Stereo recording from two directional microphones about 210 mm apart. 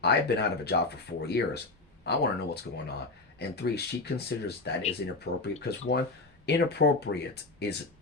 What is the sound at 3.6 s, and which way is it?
Speech, 50° left (ahead or behind).